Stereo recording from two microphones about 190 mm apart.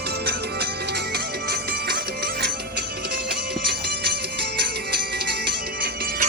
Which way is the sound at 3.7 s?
60° right (ahead or behind).